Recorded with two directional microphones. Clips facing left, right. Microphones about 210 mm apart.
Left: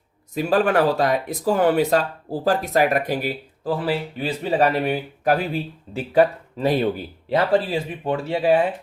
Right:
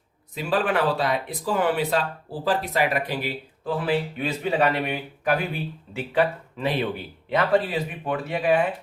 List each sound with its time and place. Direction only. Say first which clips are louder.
0.3 s speech: left 5 dB; 45° left (ahead or behind)